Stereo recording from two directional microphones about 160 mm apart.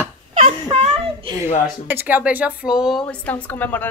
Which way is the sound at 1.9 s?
10° right (ahead or behind).